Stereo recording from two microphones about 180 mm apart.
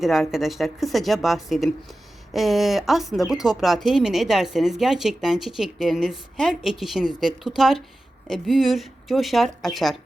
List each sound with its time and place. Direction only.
0.0 s speech: centre (ahead or behind)